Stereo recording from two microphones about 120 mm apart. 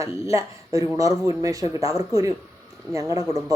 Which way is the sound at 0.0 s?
25° right (ahead or behind).